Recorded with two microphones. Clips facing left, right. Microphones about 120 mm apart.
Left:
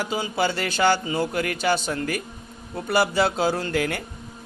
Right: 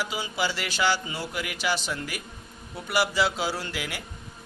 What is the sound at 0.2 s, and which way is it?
A man's voice, 50° left (ahead or behind).